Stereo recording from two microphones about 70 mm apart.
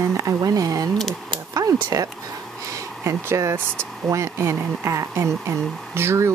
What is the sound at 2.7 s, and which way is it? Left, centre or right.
Speech, right.